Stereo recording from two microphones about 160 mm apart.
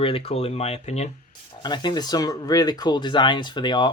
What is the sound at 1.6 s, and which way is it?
Speech, 25° left (ahead or behind).